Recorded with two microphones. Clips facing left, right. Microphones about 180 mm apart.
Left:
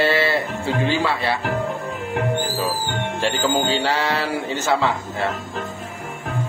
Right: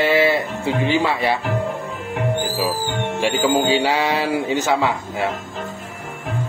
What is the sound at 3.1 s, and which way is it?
A man's voice, 10° right (ahead or behind).